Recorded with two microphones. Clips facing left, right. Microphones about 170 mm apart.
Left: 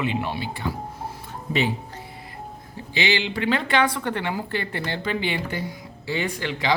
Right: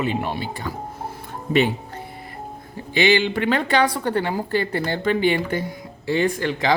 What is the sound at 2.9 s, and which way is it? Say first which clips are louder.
Speech: right 6 dB; 50° right (ahead or behind).